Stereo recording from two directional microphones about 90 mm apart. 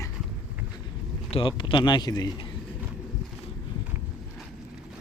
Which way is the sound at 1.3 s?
70° left (ahead or behind).